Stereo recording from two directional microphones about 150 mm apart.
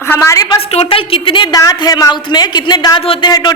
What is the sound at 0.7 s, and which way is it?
A woman's voice, 40° left (ahead or behind).